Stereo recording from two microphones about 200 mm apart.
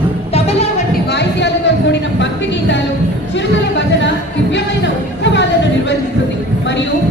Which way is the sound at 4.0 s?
65° left (ahead or behind).